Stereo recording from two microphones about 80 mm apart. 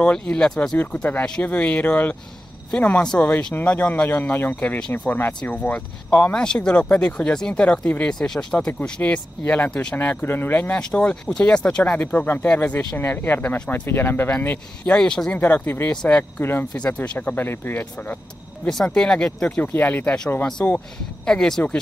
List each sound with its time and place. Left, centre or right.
0.0 s speech: centre
9.9 s speech: left
10.8 s speech: centre
15.0 s speech: centre
15.3 s speech: left
16.3 s speech: left
16.7 s speech: centre
18.9 s speech: centre; by 20.7 s left
21.3 s speech: centre